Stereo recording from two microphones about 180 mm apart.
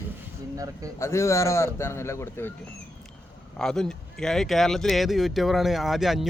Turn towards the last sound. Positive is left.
turn(degrees=0)  # may be behind; listen again after turning